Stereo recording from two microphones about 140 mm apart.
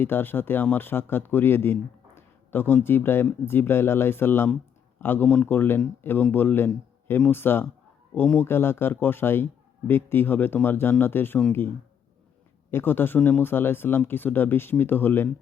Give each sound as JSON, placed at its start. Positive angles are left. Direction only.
{"t": 0.0, "sound": "speech", "side_deg": 15}
{"t": 12.7, "sound": "speech", "side_deg": 15}